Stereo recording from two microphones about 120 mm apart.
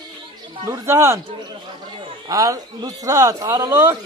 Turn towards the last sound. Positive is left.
turn(degrees=-20)  # may be behind; listen again after turning